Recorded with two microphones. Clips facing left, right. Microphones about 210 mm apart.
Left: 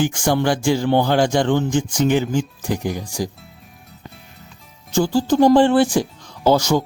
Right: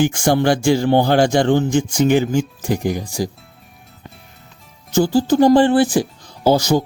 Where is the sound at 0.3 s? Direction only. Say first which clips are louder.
Right 3 dB; 40° right (ahead or behind).